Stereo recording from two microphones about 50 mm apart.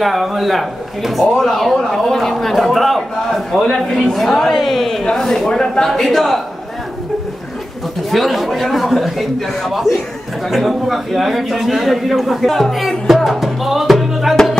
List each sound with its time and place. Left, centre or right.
0.0 s a man's voice: centre
8.1 s a man's voice: centre
14.3 s music: centre